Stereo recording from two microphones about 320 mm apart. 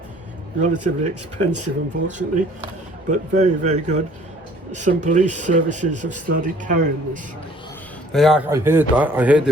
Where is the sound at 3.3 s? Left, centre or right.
Right.